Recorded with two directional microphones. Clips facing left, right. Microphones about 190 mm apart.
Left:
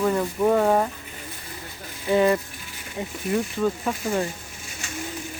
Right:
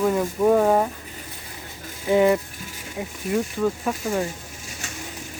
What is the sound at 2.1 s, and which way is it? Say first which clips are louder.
Speech: right 2 dB; 15° right (ahead or behind).